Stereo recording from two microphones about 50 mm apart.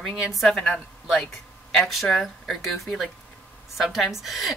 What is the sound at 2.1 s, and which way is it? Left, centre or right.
A woman's voice, centre.